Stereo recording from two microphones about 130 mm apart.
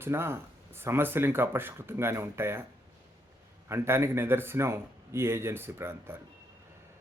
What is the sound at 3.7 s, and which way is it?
A man's voice, 20° right (ahead or behind).